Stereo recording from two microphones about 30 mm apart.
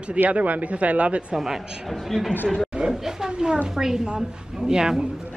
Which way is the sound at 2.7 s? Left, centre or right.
Right.